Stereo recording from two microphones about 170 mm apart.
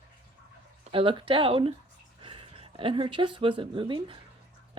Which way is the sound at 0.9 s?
30° right (ahead or behind).